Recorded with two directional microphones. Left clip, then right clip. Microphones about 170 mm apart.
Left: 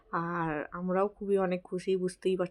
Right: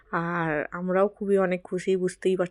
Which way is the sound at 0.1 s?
25° right (ahead or behind).